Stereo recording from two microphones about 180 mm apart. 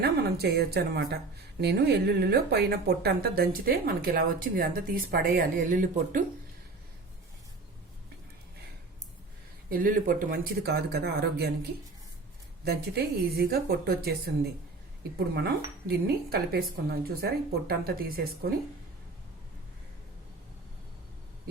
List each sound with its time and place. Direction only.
0.0 s a woman's voice: 60° right (ahead or behind)
9.6 s a woman's voice: 50° right (ahead or behind)
15.4 s a woman's voice: 60° right (ahead or behind)